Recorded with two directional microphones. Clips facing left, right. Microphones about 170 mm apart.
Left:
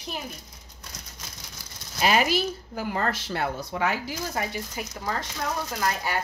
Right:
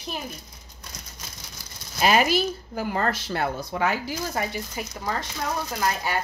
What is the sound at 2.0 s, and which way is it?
Speech, 50° right (ahead or behind).